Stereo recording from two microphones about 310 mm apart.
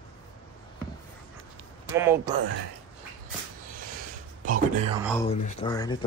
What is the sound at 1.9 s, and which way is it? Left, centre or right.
Speech, centre.